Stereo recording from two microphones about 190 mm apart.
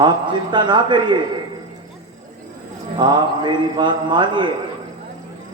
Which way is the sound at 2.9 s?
25° right (ahead or behind).